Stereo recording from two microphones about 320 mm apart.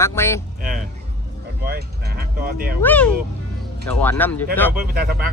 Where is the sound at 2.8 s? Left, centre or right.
Centre.